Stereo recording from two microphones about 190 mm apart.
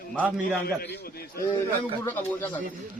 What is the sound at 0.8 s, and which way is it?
Speech, 55° left (ahead or behind).